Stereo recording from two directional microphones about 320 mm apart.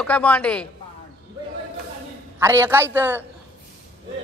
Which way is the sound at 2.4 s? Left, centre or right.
Centre.